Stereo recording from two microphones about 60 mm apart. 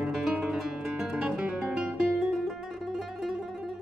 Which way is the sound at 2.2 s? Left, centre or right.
Centre.